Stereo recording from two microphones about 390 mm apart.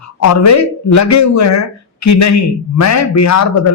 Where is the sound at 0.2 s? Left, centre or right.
Left.